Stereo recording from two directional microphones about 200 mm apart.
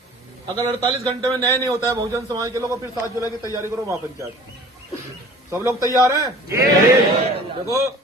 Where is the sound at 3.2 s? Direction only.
15° left (ahead or behind).